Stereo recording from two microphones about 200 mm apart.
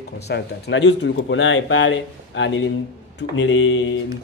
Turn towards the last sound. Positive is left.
turn(degrees=75)  # may be behind; listen again after turning